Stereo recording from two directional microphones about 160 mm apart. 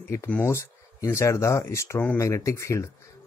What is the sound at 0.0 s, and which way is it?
Speech, 15° left (ahead or behind).